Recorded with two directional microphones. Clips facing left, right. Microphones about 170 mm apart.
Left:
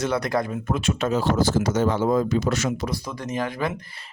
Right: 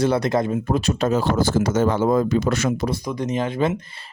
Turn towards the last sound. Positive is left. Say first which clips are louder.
# right 5 dB
turn(degrees=-25)  # may be behind; listen again after turning